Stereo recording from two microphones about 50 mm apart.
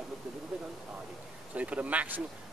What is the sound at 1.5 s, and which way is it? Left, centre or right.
Speech, right.